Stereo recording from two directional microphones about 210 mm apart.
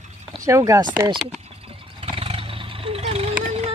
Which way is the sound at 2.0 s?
25° right (ahead or behind).